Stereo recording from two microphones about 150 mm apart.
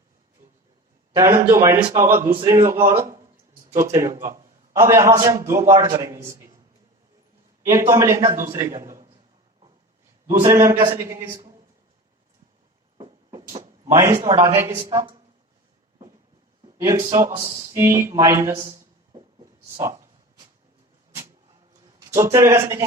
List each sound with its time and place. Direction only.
1.2 s a man's voice: 15° right (ahead or behind)
7.6 s a man's voice: 20° right (ahead or behind)
10.2 s a man's voice: 20° right (ahead or behind)
13.0 s a sound: 35° right (ahead or behind)
13.9 s a man's voice: 20° right (ahead or behind)
14.8 s speech: 30° right (ahead or behind)
16.6 s a man's voice: 20° right (ahead or behind)
19.8 s a sound: 20° right (ahead or behind)
21.9 s speech: 20° right (ahead or behind)